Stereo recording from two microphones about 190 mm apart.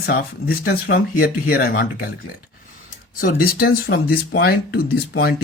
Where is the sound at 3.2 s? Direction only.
50° left (ahead or behind).